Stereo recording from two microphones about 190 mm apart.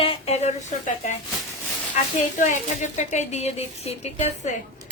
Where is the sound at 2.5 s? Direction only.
40° left (ahead or behind).